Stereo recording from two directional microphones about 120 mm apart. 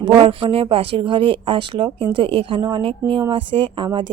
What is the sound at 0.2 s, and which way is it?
Speech, 50° right (ahead or behind).